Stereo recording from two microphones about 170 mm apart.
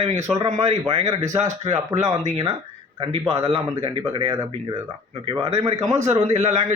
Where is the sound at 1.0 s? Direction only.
20° right (ahead or behind).